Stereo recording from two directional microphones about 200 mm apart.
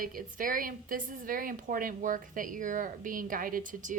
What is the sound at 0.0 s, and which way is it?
A woman's voice, 45° right (ahead or behind).